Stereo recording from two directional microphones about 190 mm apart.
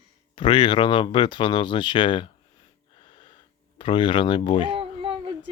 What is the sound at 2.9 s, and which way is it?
Sniff, 25° left (ahead or behind).